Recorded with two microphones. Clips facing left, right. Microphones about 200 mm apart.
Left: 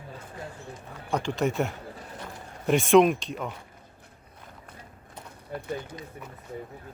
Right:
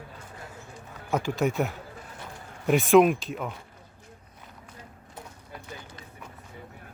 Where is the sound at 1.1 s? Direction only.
5° right (ahead or behind).